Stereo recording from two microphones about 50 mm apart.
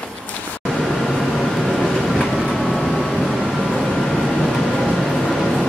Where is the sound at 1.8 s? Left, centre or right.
Centre.